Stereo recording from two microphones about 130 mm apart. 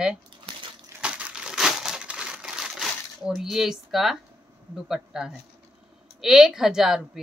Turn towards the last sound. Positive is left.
turn(degrees=-5)  # may be behind; listen again after turning